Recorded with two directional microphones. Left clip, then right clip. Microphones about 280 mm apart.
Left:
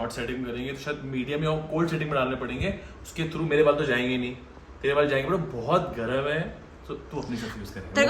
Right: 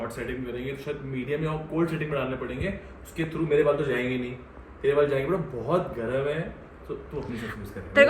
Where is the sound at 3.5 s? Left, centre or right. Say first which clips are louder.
Left 2 dB; centre.